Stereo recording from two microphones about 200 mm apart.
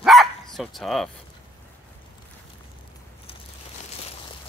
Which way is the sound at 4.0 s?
30° left (ahead or behind).